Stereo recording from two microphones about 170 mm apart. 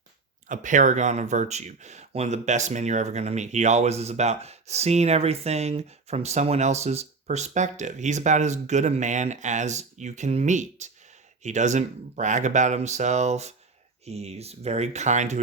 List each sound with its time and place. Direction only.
0.4 s speech: 50° right (ahead or behind)